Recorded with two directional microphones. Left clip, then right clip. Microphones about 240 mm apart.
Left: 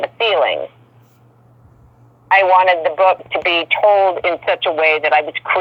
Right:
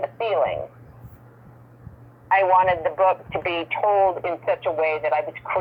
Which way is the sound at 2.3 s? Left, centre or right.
Left.